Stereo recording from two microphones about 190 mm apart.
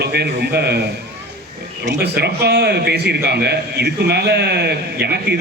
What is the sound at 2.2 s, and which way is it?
A man's voice, 60° right (ahead or behind).